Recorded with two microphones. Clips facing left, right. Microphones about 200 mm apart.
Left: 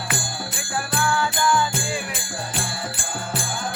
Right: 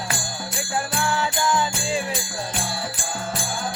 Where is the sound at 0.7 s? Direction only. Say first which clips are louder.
Left 1 dB; 25° right (ahead or behind).